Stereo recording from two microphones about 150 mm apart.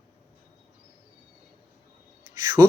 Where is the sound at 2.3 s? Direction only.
20° right (ahead or behind).